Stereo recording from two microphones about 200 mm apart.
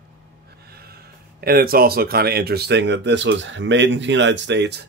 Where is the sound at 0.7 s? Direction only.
50° right (ahead or behind).